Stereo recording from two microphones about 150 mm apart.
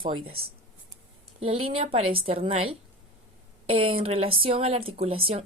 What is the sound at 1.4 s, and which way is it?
Speech, 40° right (ahead or behind).